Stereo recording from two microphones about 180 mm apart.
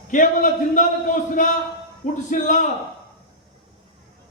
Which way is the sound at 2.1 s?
45° left (ahead or behind).